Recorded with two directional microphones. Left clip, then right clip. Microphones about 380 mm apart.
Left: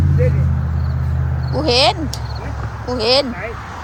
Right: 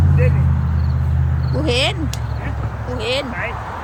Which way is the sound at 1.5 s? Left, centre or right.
Centre.